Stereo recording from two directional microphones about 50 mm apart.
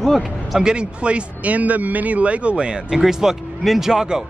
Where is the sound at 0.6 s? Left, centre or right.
Centre.